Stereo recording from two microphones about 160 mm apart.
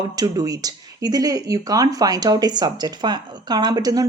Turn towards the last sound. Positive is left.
turn(degrees=-25)  # may be behind; listen again after turning